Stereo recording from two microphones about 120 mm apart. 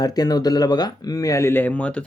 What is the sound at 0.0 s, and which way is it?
Speech, 35° left (ahead or behind).